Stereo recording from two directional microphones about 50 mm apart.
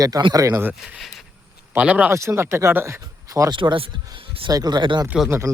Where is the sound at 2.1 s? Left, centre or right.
Right.